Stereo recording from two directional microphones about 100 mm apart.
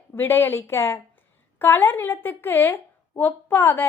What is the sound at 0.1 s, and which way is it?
A woman's voice, 20° left (ahead or behind).